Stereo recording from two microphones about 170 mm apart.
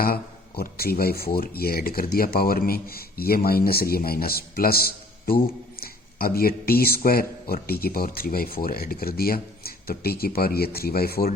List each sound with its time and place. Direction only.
0.0 s speech: 60° left (ahead or behind)